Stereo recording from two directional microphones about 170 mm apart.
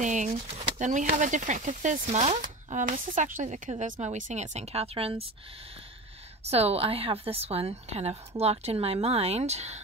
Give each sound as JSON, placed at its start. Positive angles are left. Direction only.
{"t": 0.0, "sound": "a sound", "side_deg": -45}
{"t": 0.4, "sound": "speech", "side_deg": -40}
{"t": 6.4, "sound": "a woman's voice", "side_deg": -35}